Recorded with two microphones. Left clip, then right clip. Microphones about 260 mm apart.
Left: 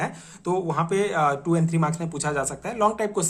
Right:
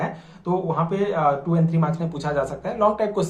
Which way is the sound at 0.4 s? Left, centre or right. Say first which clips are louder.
Right 1 dB; left.